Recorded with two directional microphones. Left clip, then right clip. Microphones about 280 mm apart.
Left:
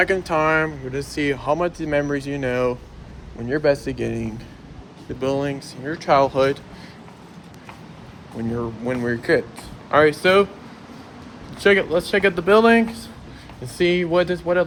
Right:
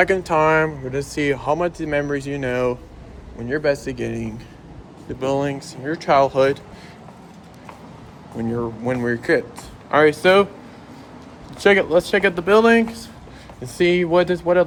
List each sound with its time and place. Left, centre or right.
0.0 s speech: centre
8.4 s speech: centre
11.6 s speech: centre